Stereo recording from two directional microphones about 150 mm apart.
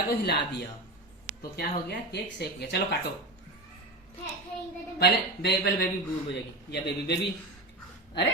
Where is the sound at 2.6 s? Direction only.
90° left.